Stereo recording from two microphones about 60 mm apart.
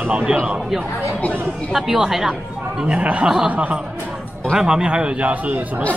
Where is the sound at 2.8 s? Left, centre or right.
Right.